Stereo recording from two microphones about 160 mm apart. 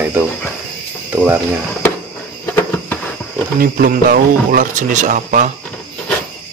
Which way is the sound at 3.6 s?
65° right (ahead or behind).